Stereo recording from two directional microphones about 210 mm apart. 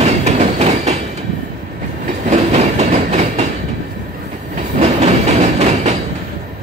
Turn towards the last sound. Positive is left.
turn(degrees=-35)  # may be behind; listen again after turning